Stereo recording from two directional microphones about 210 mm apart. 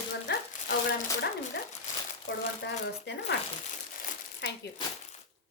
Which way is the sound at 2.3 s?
65° left (ahead or behind).